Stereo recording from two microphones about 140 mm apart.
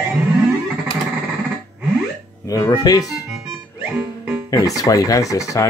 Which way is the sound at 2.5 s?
30° left (ahead or behind).